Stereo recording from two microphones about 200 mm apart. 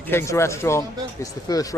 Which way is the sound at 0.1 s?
10° left (ahead or behind).